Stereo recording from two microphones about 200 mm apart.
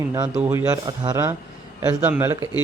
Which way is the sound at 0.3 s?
10° right (ahead or behind).